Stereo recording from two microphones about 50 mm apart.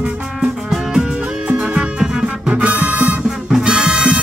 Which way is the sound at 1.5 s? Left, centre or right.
Right.